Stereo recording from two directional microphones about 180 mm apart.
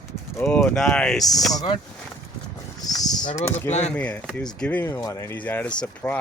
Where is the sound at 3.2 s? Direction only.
40° left (ahead or behind).